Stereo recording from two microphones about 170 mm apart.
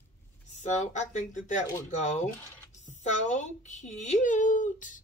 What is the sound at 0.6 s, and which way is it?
A woman's voice, 45° left (ahead or behind).